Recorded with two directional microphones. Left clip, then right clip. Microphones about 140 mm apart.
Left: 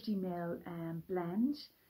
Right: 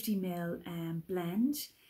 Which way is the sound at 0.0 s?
15° right (ahead or behind).